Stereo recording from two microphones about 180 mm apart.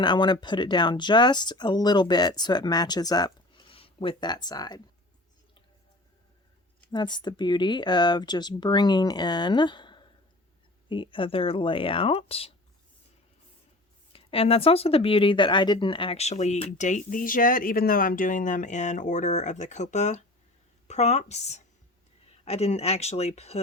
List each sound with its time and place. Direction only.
0.0 s speech: 25° left (ahead or behind)
6.9 s speech: 25° left (ahead or behind)
14.1 s speech: 30° left (ahead or behind)